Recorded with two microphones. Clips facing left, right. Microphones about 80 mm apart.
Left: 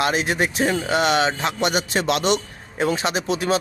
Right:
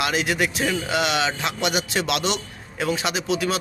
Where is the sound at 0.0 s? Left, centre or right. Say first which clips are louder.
Left 2 dB; left.